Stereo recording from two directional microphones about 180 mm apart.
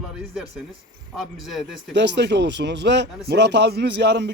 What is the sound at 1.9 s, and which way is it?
A man's voice, 75° right (ahead or behind).